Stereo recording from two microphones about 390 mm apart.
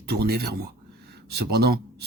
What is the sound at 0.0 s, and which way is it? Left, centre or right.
Speech, right.